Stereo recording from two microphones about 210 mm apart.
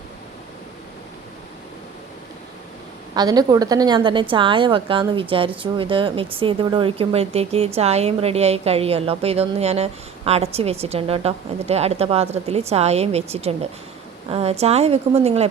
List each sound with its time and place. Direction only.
3.2 s speech: 20° right (ahead or behind)